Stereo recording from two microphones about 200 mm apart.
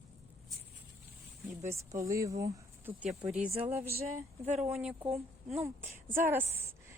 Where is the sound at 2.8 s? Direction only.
5° right (ahead or behind).